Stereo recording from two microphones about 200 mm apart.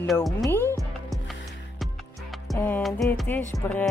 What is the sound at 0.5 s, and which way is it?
Music, 10° left (ahead or behind).